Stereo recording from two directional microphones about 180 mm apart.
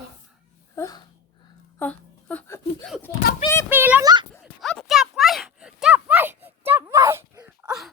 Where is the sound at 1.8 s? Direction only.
10° left (ahead or behind).